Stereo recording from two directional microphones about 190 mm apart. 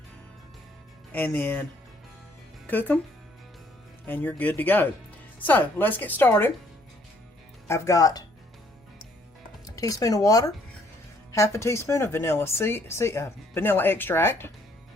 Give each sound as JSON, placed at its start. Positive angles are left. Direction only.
{"t": 1.1, "sound": "speech", "side_deg": 10}
{"t": 2.6, "sound": "speech", "side_deg": 10}
{"t": 4.0, "sound": "speech", "side_deg": 10}
{"t": 7.7, "sound": "speech", "side_deg": 15}
{"t": 9.6, "sound": "speech", "side_deg": 20}